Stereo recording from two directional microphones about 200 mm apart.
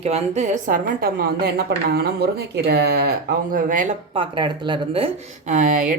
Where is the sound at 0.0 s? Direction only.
35° right (ahead or behind).